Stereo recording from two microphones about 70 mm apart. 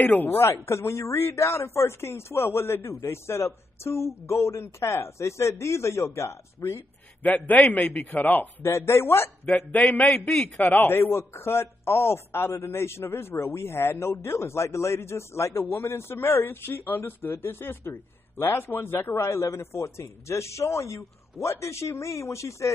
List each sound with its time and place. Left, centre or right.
0.0 s a man's voice: left
0.7 s a woman's voice: left
7.2 s a man's voice: left
8.7 s a woman's voice: left
10.0 s a man's voice: centre
10.6 s a woman's voice: left